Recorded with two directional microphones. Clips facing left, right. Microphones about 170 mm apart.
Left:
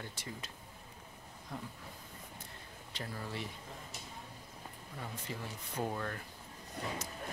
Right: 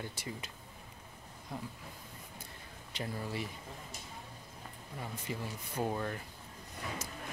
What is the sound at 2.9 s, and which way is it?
Speech, 10° right (ahead or behind).